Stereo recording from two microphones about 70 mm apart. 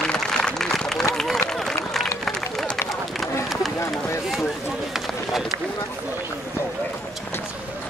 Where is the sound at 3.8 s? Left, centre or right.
Left.